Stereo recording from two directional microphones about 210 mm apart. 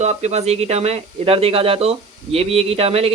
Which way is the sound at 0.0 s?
30° right (ahead or behind).